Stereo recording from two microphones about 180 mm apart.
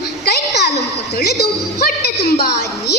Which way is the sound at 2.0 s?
65° left (ahead or behind).